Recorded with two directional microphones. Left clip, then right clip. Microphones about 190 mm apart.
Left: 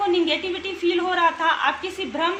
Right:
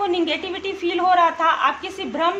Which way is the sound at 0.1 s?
55° right (ahead or behind).